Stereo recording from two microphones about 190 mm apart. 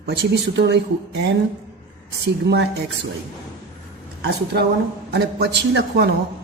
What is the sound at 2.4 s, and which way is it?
Speech, 60° right (ahead or behind).